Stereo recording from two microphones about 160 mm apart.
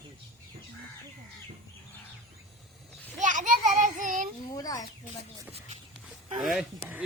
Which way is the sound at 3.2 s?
50° right (ahead or behind).